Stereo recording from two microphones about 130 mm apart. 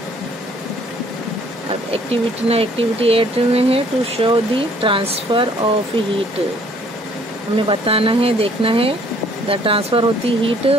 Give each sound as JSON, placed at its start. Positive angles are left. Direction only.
{"t": 2.4, "sound": "speech", "side_deg": -50}
{"t": 7.5, "sound": "speech", "side_deg": -45}